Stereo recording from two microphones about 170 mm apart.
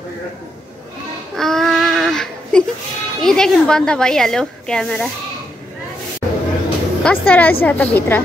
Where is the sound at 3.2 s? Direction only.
5° left (ahead or behind).